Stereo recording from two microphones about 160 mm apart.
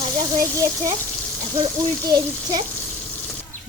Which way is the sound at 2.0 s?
25° right (ahead or behind).